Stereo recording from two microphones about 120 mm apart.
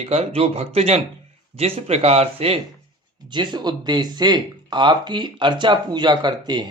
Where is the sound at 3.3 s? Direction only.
40° right (ahead or behind).